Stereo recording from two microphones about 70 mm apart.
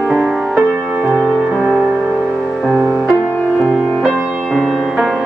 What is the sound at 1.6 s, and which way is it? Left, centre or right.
Music, centre.